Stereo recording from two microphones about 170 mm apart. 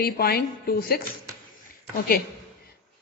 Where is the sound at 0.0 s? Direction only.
65° left (ahead or behind).